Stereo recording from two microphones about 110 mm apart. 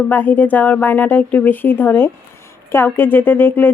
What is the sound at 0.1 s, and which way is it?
A woman's voice, 15° left (ahead or behind).